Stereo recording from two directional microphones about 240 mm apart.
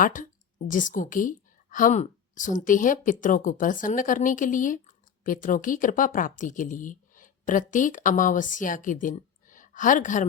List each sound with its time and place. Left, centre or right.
0.0 s a woman's voice: left